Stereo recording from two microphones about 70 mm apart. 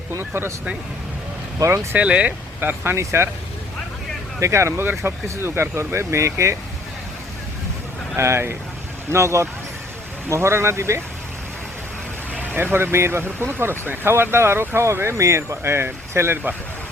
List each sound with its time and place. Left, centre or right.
1.5 s speech: right
2.0 s speech: centre; by 3.2 s right
4.4 s speech: right
8.1 s speech: right
12.5 s speech: right